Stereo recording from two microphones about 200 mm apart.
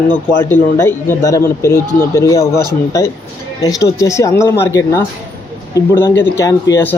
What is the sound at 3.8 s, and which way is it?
Speech, 15° left (ahead or behind).